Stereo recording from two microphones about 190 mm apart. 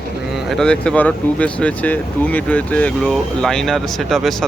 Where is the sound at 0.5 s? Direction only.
5° left (ahead or behind).